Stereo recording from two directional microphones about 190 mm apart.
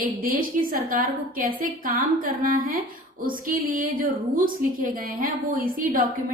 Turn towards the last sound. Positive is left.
turn(degrees=-45)  # may be behind; listen again after turning